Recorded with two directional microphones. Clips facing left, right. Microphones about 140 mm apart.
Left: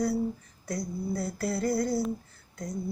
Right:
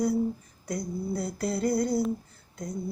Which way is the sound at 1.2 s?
20° right (ahead or behind).